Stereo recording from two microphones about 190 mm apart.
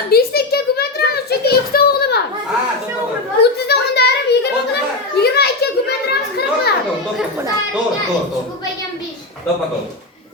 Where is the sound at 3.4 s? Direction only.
60° left (ahead or behind).